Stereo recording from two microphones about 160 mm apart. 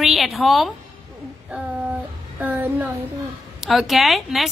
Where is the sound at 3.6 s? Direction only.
Centre (ahead or behind).